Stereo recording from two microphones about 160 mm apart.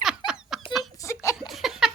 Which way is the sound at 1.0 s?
20° left (ahead or behind).